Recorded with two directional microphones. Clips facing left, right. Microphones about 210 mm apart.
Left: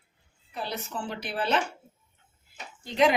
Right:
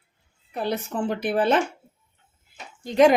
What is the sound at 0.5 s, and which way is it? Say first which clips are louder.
A woman's voice: right 8 dB; 55° right (ahead or behind).